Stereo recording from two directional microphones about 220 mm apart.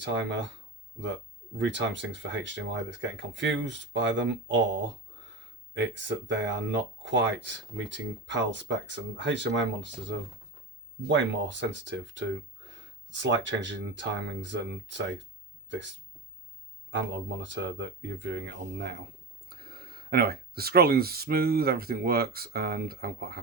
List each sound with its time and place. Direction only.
0.0 s speech: 55° right (ahead or behind)
16.9 s speech: 55° right (ahead or behind)